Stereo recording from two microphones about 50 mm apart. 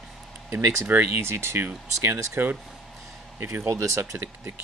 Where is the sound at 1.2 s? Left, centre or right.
Right.